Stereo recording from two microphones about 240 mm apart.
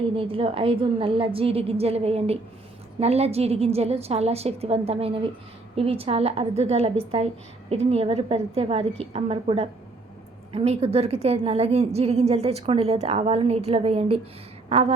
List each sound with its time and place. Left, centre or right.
0.2 s a woman's voice: right